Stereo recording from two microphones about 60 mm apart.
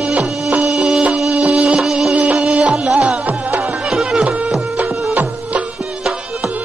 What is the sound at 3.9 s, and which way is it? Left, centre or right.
Music, centre.